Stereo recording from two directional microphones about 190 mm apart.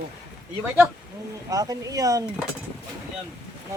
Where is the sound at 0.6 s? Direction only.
10° right (ahead or behind).